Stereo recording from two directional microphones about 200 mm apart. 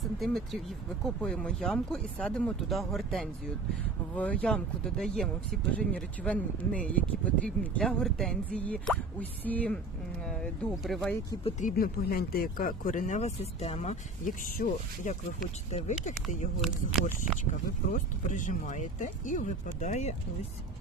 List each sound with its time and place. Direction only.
0.0 s speech: centre (ahead or behind)
11.7 s speech: 50° left (ahead or behind)
17.9 s speech: 40° left (ahead or behind)